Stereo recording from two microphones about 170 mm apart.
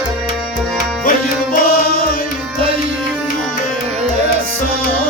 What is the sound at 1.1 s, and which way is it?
Music, 55° left (ahead or behind).